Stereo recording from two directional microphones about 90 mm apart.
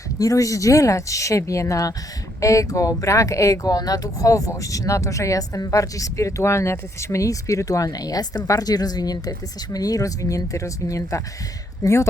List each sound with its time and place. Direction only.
0.2 s speech: 40° left (ahead or behind)